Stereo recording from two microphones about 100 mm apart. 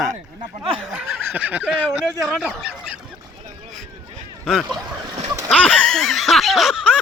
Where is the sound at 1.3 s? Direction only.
15° right (ahead or behind).